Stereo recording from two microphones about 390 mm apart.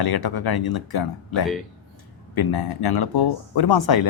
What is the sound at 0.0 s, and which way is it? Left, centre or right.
Speech, left.